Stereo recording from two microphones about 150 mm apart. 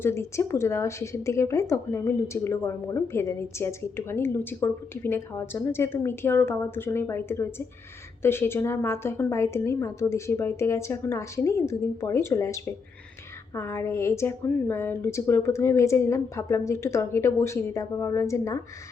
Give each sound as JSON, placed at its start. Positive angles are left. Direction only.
{"t": 0.0, "sound": "a woman's voice", "side_deg": 15}